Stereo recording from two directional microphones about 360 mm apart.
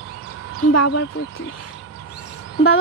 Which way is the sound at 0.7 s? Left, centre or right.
Left.